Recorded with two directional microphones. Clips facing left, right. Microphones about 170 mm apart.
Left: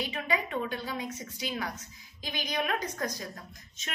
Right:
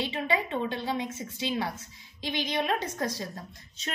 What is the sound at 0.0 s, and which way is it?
A woman's voice, 25° right (ahead or behind).